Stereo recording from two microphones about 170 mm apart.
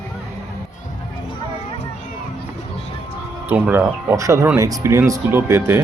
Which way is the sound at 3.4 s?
10° right (ahead or behind).